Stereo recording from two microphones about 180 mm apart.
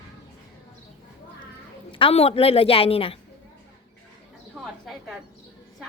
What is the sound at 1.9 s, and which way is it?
A woman's voice, 30° left (ahead or behind).